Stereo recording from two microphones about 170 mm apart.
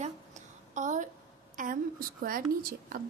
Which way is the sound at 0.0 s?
45° right (ahead or behind).